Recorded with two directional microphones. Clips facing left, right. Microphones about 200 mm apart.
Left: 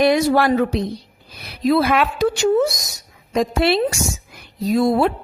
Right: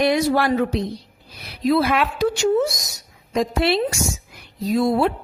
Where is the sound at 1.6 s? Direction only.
60° left (ahead or behind).